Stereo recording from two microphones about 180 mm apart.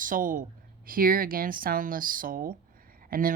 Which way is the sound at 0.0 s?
50° right (ahead or behind).